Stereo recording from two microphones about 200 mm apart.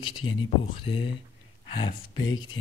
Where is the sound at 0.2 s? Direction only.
90° left.